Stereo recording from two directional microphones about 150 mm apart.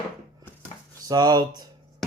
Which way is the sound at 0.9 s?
25° right (ahead or behind).